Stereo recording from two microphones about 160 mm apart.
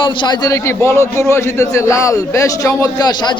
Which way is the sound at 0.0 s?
30° left (ahead or behind).